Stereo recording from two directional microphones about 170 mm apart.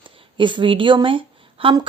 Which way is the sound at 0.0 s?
30° right (ahead or behind).